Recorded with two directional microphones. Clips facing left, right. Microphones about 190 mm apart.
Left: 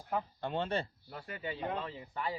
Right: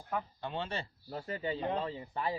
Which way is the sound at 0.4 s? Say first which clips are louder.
Left 4 dB; 50° left (ahead or behind).